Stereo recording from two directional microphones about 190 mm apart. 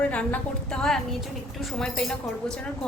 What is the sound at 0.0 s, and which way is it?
Speech, 5° left (ahead or behind).